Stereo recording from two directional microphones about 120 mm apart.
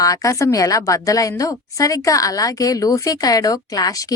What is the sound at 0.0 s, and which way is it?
A woman's voice, 30° left (ahead or behind).